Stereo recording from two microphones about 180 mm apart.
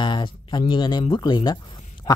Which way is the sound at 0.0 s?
25° left (ahead or behind).